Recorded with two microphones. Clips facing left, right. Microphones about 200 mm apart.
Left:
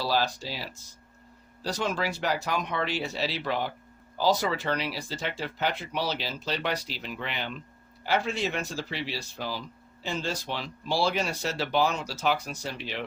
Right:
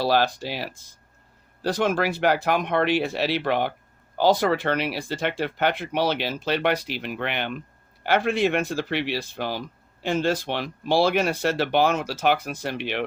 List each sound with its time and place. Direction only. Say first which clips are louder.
0.0 s speech: right 6 dB; 65° right (ahead or behind)